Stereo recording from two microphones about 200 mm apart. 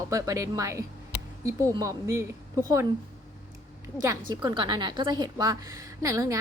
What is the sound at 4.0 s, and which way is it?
A woman's voice, 15° right (ahead or behind).